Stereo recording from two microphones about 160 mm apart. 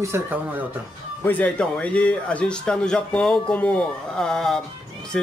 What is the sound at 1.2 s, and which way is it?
Speech, 10° left (ahead or behind).